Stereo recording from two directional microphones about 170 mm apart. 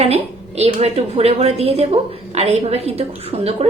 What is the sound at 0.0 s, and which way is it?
A woman's voice, 35° right (ahead or behind).